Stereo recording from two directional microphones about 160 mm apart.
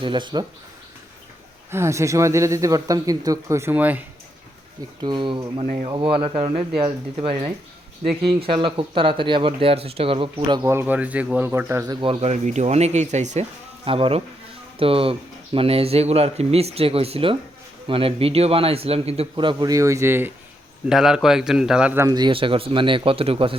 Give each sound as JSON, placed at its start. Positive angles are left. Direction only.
{"t": 0.0, "sound": "speech", "side_deg": -30}
{"t": 1.7, "sound": "speech", "side_deg": -15}
{"t": 5.0, "sound": "a man's voice", "side_deg": -30}
{"t": 5.6, "sound": "speech", "side_deg": -50}
{"t": 5.9, "sound": "a man's voice", "side_deg": -35}
{"t": 10.6, "sound": "speech", "side_deg": -15}
{"t": 11.9, "sound": "a man's voice", "side_deg": -35}
{"t": 12.3, "sound": "speech", "side_deg": -45}
{"t": 13.8, "sound": "a man's voice", "side_deg": -35}
{"t": 20.8, "sound": "a man's voice", "side_deg": -5}
{"t": 22.0, "sound": "a man's voice", "side_deg": -25}